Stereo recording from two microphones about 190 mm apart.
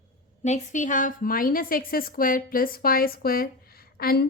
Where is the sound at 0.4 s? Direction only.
40° left (ahead or behind).